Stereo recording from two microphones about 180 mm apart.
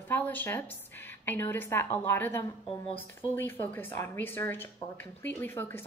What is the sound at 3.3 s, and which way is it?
A woman's voice, 10° left (ahead or behind).